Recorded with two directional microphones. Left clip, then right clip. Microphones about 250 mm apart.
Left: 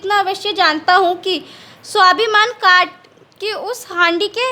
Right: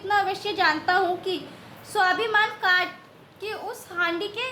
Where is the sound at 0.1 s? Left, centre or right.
Left.